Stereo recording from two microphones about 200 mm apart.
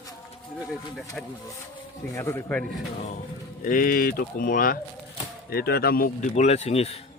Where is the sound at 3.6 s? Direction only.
45° left (ahead or behind).